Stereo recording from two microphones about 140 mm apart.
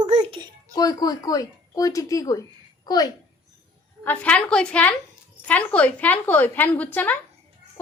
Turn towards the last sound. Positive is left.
turn(degrees=10)  # may be behind; listen again after turning